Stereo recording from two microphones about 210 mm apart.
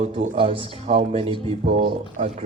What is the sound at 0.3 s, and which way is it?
Speech, 25° right (ahead or behind).